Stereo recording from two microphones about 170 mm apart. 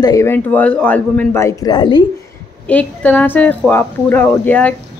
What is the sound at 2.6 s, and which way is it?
A man's voice, 10° left (ahead or behind).